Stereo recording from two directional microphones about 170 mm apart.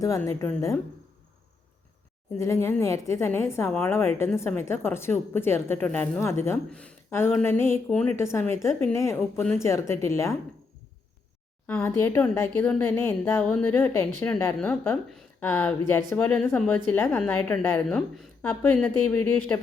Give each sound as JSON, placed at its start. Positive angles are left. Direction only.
{"t": 0.0, "sound": "speech", "side_deg": 20}
{"t": 2.4, "sound": "speech", "side_deg": 15}
{"t": 9.4, "sound": "speech", "side_deg": 5}
{"t": 9.6, "sound": "speech", "side_deg": 15}
{"t": 11.6, "sound": "speech", "side_deg": 10}
{"t": 17.8, "sound": "speech", "side_deg": 0}